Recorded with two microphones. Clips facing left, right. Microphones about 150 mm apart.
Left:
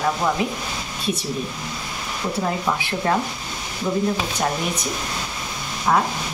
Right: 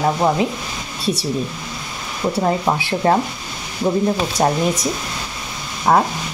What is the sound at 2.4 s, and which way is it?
Speech, 35° right (ahead or behind).